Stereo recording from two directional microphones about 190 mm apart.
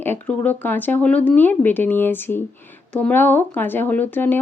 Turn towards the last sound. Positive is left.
turn(degrees=10)  # may be behind; listen again after turning